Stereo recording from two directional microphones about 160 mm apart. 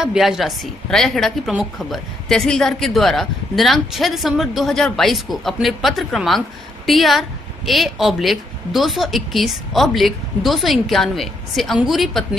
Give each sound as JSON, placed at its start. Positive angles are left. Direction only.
{"t": 0.0, "sound": "a woman's voice", "side_deg": -5}